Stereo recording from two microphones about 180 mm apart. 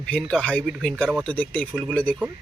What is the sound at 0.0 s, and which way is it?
Speech, 5° left (ahead or behind).